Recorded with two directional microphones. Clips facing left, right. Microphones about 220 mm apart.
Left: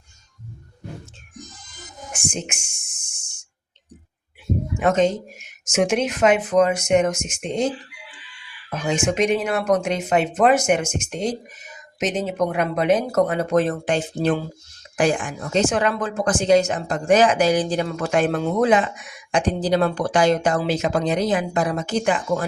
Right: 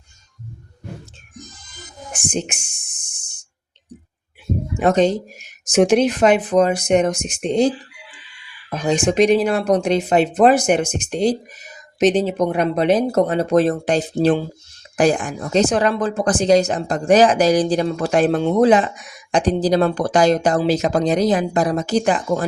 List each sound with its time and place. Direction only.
2.3 s a sound: 35° right (ahead or behind)
4.8 s a woman's voice: 35° right (ahead or behind)
8.7 s a woman's voice: 35° right (ahead or behind)